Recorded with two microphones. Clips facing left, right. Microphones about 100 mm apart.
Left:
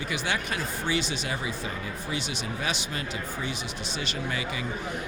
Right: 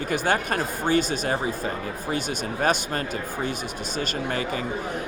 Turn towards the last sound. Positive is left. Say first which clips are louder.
# right 5 dB
turn(degrees=-45)  # may be behind; listen again after turning